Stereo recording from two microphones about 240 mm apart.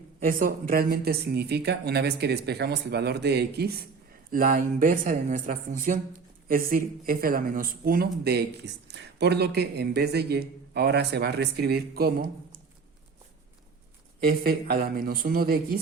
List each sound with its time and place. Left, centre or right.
0.2 s speech: right
14.3 s speech: right